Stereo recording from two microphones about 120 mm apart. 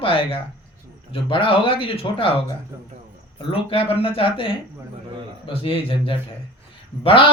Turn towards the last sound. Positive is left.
turn(degrees=50)  # may be behind; listen again after turning